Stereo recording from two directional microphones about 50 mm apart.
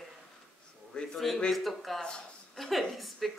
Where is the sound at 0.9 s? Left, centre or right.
Centre.